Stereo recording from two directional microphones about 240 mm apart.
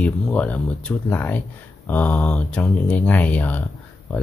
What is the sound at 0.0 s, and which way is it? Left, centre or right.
Speech, centre.